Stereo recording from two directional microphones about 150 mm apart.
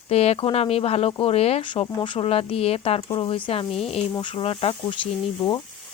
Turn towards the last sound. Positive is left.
turn(degrees=30)  # may be behind; listen again after turning